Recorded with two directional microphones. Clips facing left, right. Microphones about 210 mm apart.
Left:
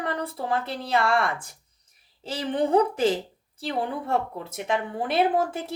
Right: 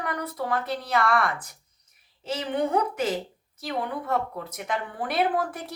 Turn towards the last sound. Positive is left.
turn(degrees=25)  # may be behind; listen again after turning